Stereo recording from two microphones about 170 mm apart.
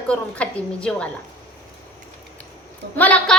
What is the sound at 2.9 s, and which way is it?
Speech, 10° left (ahead or behind).